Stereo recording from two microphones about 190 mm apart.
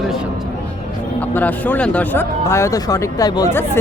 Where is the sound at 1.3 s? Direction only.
10° left (ahead or behind).